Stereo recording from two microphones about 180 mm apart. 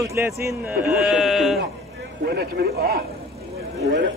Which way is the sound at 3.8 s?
80° right.